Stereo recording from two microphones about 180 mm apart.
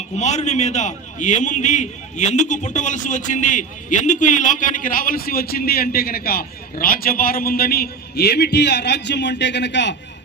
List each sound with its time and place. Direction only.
0.2 s a man's voice: 40° left (ahead or behind); by 9.9 s 75° left (ahead or behind)